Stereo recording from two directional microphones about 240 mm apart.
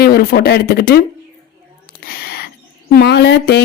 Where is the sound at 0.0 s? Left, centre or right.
Left.